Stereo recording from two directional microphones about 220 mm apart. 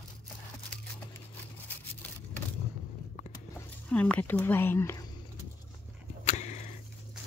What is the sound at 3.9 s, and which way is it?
Speech, 5° left (ahead or behind).